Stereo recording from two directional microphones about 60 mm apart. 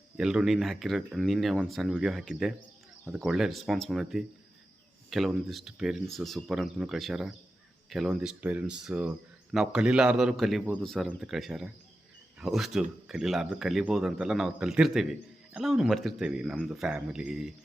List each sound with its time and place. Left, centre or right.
0.2 s speech: centre
6.1 s speech: centre
6.5 s speech: centre
8.4 s speech: right
8.6 s speech: centre
10.3 s speech: centre
16.2 s speech: centre